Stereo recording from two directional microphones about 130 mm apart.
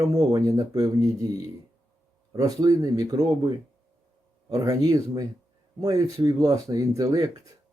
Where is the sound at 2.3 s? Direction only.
30° right (ahead or behind).